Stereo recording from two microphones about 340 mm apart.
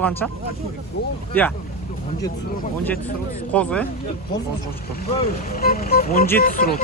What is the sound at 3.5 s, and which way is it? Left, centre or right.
Speech, centre.